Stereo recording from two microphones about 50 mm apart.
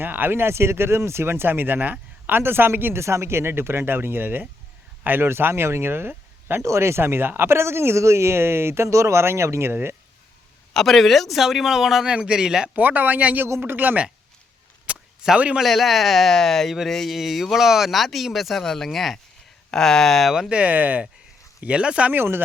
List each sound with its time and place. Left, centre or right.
0.0 s speech: right
3.0 s speech: right
6.6 s speech: right
9.2 s speech: right
10.8 s speech: centre
12.0 s speech: centre
12.7 s speech: right
14.8 s a sound: centre
15.6 s speech: centre
20.5 s speech: right
22.1 s speech: right